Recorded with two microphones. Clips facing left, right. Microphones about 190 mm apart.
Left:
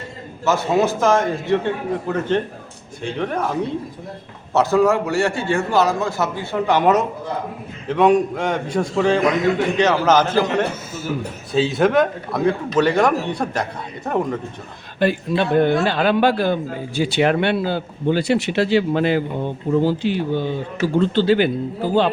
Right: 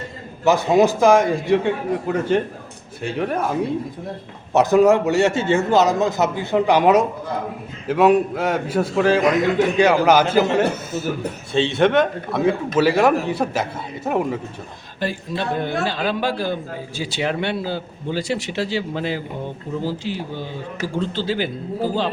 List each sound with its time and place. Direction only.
0.4 s a man's voice: 15° right (ahead or behind)
11.5 s speech: centre (ahead or behind)
14.9 s a man's voice: 60° left (ahead or behind)